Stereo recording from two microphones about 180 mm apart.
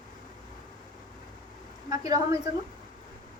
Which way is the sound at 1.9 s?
20° right (ahead or behind).